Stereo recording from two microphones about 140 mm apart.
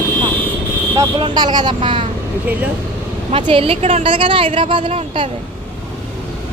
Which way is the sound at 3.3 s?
40° right (ahead or behind).